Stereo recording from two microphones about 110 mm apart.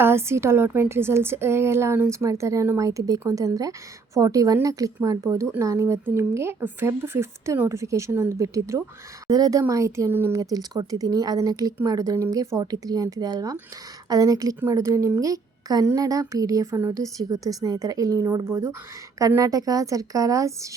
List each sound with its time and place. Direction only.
0.0 s a woman's voice: 20° right (ahead or behind)